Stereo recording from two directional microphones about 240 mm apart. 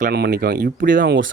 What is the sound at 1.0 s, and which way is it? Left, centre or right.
Speech, right.